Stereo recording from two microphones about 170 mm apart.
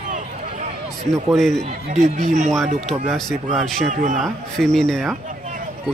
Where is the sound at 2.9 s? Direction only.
Centre (ahead or behind).